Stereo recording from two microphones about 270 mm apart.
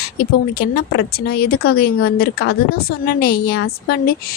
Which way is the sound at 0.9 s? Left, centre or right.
Left.